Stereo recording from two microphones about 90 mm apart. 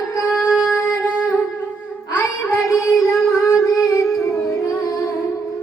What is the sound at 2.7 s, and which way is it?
Child singing, 35° left (ahead or behind).